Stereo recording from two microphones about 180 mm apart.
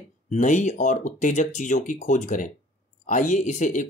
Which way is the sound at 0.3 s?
40° left (ahead or behind).